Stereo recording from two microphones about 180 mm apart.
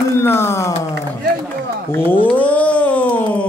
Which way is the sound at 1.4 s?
10° left (ahead or behind).